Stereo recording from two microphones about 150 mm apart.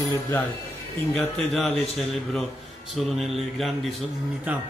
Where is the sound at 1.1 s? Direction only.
Centre (ahead or behind).